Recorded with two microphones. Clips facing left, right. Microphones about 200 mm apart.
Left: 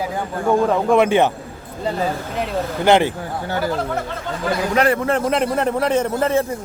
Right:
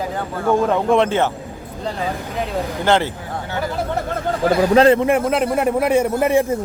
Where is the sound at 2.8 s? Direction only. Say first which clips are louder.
Left 3 dB; 15° left (ahead or behind).